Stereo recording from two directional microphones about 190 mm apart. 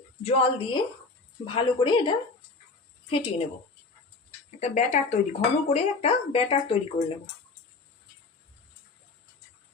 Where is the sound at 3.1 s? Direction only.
30° left (ahead or behind).